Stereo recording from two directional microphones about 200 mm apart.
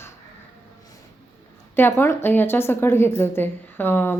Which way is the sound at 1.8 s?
10° left (ahead or behind).